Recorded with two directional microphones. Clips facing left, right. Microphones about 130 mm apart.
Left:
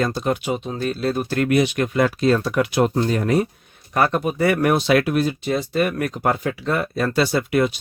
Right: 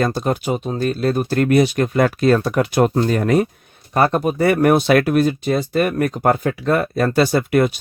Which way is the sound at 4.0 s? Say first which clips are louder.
Right 3 dB; 35° right (ahead or behind).